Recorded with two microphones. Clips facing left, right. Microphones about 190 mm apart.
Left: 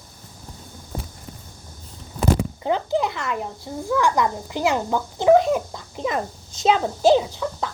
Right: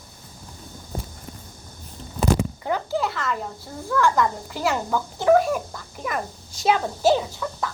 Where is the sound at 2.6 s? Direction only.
20° left (ahead or behind).